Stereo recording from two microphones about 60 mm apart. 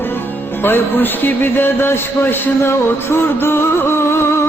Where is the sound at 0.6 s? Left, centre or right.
Left.